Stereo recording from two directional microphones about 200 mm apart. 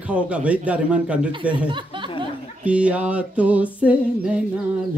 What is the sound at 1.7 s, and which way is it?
Speech, 25° right (ahead or behind).